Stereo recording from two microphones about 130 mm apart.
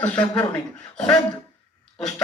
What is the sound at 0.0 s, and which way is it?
Speech, 10° left (ahead or behind).